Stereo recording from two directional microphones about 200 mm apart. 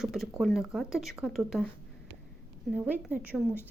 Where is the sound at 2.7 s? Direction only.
5° right (ahead or behind).